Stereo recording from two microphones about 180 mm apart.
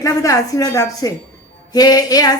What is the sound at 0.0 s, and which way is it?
A woman's voice, 20° left (ahead or behind).